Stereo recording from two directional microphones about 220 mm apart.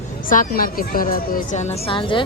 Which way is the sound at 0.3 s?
40° left (ahead or behind).